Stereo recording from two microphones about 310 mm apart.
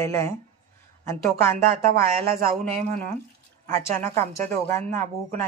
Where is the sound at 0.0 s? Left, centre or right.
Centre.